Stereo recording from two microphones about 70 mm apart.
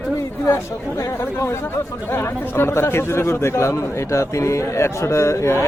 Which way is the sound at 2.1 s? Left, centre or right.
Left.